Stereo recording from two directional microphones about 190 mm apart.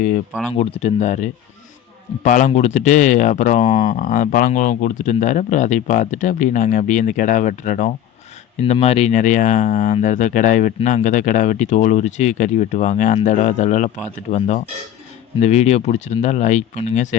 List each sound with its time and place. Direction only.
0.5 s speech: 35° left (ahead or behind)